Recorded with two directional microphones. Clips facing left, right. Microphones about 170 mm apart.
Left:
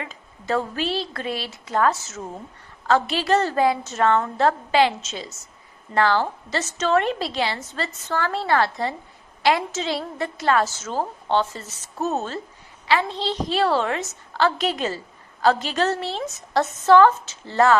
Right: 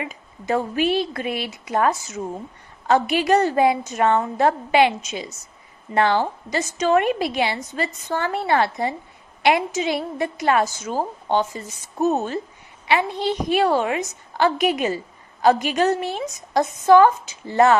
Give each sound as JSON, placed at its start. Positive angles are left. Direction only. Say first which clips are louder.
{"t": 0.0, "sound": "a woman's voice", "louder": "right 4 dB", "side_deg": -15}